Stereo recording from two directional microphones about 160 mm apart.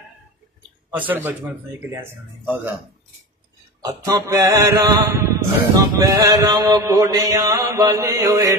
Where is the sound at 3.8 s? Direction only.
20° right (ahead or behind).